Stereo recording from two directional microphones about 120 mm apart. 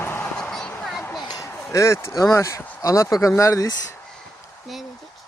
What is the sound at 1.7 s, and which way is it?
Speech, 25° left (ahead or behind).